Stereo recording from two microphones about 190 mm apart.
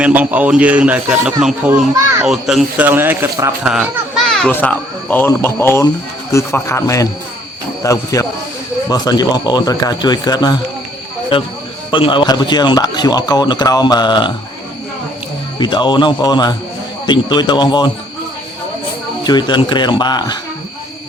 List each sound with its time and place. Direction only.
0.0 s speech: 10° right (ahead or behind)
3.7 s a child's voice: centre (ahead or behind); by 14.3 s 25° left (ahead or behind)
15.5 s speech: 25° left (ahead or behind)
19.2 s speech: 20° left (ahead or behind)